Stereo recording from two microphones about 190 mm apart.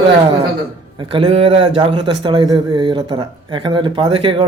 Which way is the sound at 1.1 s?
30° right (ahead or behind).